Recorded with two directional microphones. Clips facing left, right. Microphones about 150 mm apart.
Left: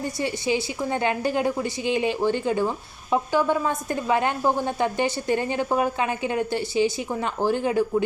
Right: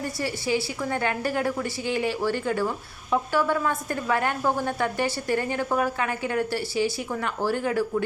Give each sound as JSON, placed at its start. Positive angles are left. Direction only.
{"t": 0.2, "sound": "a woman's voice", "side_deg": 20}